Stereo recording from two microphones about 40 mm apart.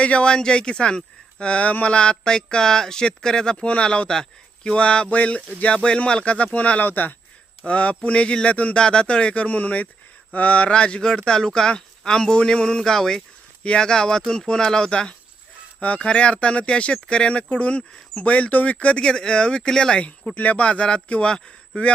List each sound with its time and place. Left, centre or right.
0.0 s speech: left
3.7 s speech: left
4.1 s speech: centre
4.7 s speech: left
5.1 s speech: left
5.7 s speech: left
6.8 s speech: left
7.6 s speech: left
8.8 s speech: left
15.8 s speech: left
20.3 s speech: left; by 21.5 s centre